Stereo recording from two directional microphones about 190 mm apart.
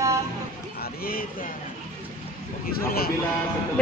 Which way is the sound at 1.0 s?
50° left (ahead or behind).